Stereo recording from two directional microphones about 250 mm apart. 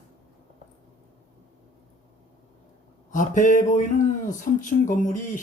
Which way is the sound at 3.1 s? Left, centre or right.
Left.